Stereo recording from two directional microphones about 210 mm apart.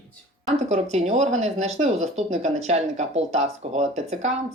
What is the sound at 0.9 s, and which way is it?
Speech, 30° right (ahead or behind).